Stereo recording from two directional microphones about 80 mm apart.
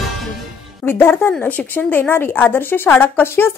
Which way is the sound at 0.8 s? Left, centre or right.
Left.